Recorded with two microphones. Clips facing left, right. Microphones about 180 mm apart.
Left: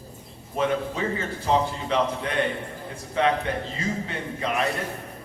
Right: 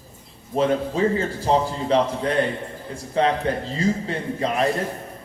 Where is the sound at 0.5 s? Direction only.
35° right (ahead or behind).